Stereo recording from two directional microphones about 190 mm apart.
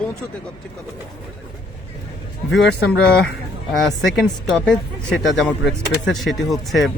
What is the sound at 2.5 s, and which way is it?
Speech, 5° left (ahead or behind).